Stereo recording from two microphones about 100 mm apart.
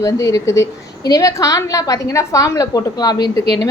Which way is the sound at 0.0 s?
35° left (ahead or behind).